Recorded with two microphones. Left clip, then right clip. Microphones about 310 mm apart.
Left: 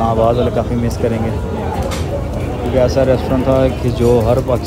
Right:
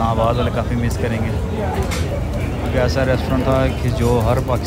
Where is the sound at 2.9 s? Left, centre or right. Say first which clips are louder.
Left 6 dB; centre.